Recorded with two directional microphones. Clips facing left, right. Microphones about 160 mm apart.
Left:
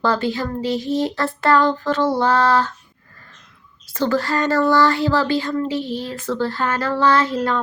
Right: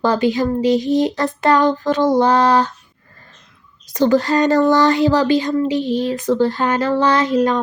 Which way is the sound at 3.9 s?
15° right (ahead or behind).